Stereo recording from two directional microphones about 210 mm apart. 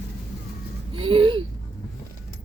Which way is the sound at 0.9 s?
25° right (ahead or behind).